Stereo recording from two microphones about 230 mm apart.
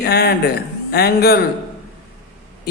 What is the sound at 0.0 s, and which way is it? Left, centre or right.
Speech, left.